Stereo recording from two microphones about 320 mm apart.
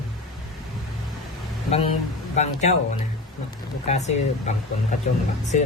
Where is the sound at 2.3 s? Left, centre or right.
Left.